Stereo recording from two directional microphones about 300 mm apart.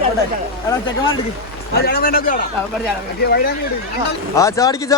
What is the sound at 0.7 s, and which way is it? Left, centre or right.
Speech, centre.